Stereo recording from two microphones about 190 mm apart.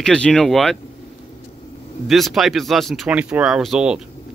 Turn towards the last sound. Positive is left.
turn(degrees=-5)  # may be behind; listen again after turning